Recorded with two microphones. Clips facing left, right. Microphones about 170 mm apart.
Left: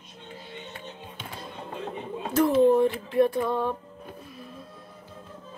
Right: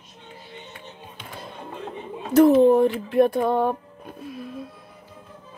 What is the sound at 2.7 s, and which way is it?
Speech, 60° right (ahead or behind).